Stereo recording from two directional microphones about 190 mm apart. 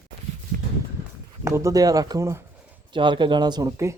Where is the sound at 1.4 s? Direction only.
15° right (ahead or behind).